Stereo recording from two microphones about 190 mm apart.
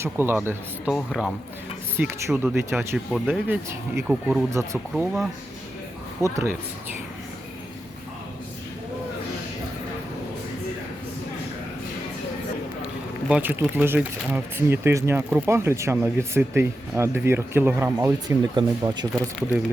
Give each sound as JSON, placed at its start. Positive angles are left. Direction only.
{"t": 0.0, "sound": "speech", "side_deg": -10}
{"t": 0.9, "sound": "speech", "side_deg": 0}
{"t": 2.0, "sound": "speech", "side_deg": -10}
{"t": 3.1, "sound": "speech", "side_deg": 0}
{"t": 3.5, "sound": "speech", "side_deg": -15}
{"t": 4.5, "sound": "speech", "side_deg": -15}
{"t": 6.2, "sound": "speech", "side_deg": -15}
{"t": 12.8, "sound": "speech", "side_deg": -5}